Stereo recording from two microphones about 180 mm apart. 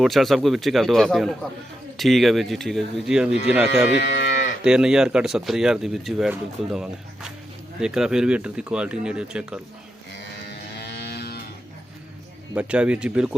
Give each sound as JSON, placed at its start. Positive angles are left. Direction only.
{"t": 0.0, "sound": "speech", "side_deg": 0}
{"t": 10.1, "sound": "livestock", "side_deg": 70}
{"t": 12.5, "sound": "speech", "side_deg": -5}